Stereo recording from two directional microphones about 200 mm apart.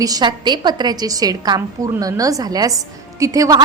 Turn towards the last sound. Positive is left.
turn(degrees=-15)  # may be behind; listen again after turning